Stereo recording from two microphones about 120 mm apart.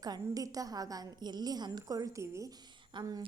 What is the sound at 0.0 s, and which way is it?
A woman's voice, 30° right (ahead or behind).